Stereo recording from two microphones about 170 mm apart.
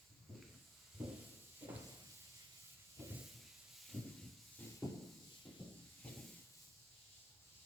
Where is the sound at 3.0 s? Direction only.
15° right (ahead or behind).